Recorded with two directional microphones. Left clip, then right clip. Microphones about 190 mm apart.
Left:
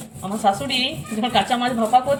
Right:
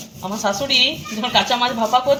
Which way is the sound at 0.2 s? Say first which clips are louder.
Left 1 dB; 10° right (ahead or behind).